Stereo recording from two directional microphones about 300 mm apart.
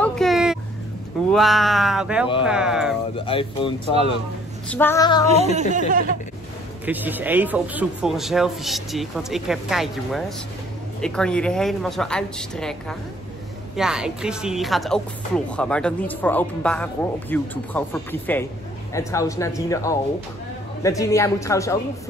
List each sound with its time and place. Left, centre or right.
0.0 s a sound: centre
1.3 s speech: centre
3.3 s a man's voice: centre
4.6 s a man's voice: centre
5.3 s speech: right
6.9 s a man's voice: centre